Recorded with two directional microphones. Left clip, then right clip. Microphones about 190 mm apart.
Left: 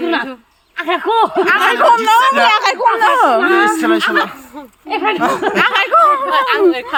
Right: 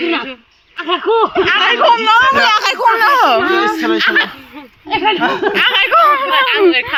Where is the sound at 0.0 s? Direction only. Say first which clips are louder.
Even; 15° left (ahead or behind).